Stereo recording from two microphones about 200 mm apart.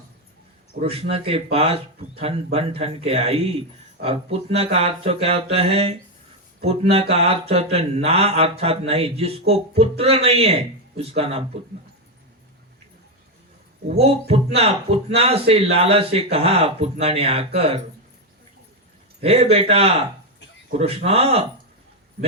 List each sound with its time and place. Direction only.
0.8 s speech: 30° right (ahead or behind)
13.9 s speech: 30° right (ahead or behind)
19.2 s speech: 30° right (ahead or behind)